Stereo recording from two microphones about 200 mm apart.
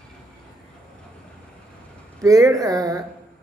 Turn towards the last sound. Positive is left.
turn(degrees=-15)  # may be behind; listen again after turning